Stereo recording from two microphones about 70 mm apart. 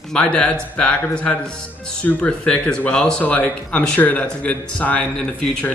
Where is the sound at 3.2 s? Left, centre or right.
Left.